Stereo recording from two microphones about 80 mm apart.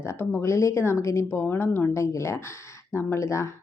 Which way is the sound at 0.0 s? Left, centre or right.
Left.